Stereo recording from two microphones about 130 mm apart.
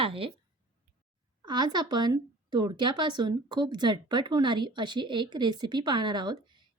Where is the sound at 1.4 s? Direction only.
35° right (ahead or behind).